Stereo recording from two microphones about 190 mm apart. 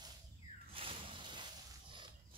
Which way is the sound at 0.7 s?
30° right (ahead or behind).